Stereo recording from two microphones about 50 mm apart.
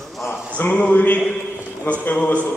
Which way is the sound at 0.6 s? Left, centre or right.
Left.